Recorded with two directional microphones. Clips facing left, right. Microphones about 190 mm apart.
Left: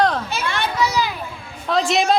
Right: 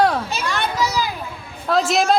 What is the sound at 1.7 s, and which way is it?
Speech, centre (ahead or behind).